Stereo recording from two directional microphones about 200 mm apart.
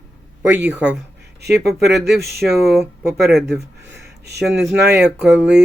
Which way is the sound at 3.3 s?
55° right (ahead or behind).